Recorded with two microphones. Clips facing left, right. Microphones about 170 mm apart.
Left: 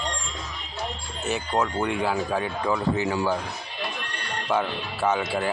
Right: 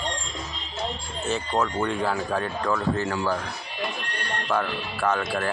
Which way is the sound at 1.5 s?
10° left (ahead or behind).